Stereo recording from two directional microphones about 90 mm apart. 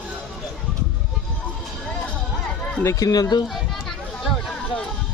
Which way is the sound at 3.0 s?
45° left (ahead or behind).